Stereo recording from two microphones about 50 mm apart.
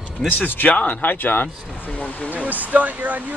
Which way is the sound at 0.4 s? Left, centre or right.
Left.